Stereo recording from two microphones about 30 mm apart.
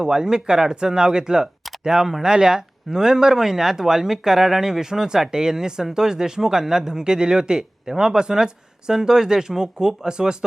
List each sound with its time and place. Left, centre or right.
0.0 s speech: right